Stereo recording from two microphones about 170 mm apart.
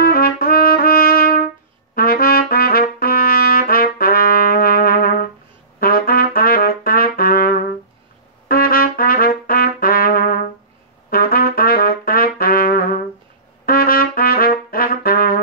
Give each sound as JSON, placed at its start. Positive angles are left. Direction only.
{"t": 0.0, "sound": "trumpet", "side_deg": 60}